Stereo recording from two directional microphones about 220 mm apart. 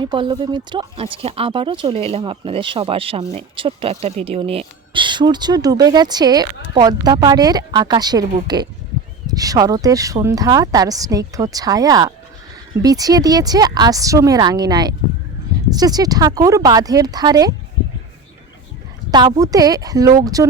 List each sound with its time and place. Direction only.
0.0 s speech: 20° right (ahead or behind)
19.1 s speech: 15° right (ahead or behind)